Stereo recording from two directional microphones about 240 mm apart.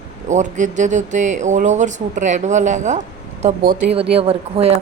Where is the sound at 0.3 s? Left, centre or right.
Right.